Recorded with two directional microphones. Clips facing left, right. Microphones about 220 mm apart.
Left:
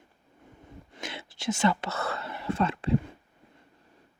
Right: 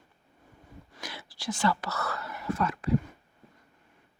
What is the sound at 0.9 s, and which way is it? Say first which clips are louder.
Whispering: left 4 dB; 25° left (ahead or behind).